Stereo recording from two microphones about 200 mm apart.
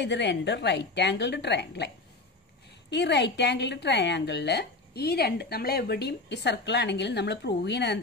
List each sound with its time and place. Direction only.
0.0 s a woman's voice: 60° left (ahead or behind)
2.9 s a woman's voice: 60° left (ahead or behind)